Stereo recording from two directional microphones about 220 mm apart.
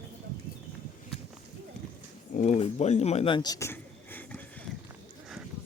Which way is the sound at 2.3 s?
30° left (ahead or behind).